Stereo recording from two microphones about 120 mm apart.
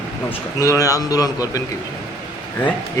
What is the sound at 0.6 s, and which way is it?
Speech, 30° left (ahead or behind).